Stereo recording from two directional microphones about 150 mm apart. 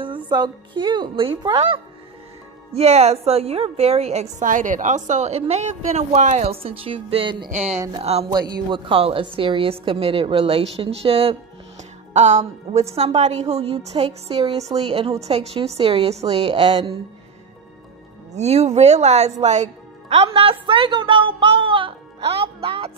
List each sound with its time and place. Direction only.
0.0 s a woman's voice: 30° right (ahead or behind)
2.7 s a woman's voice: 45° right (ahead or behind)
7.5 s a woman's voice: 50° right (ahead or behind)
8.3 s a woman's voice: 30° right (ahead or behind)
12.1 s a woman's voice: 50° right (ahead or behind); by 16.9 s 30° right (ahead or behind)
18.3 s a woman's voice: 45° right (ahead or behind)